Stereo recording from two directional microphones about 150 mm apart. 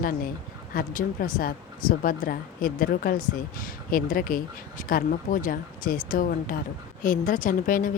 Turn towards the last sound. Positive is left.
turn(degrees=65)  # may be behind; listen again after turning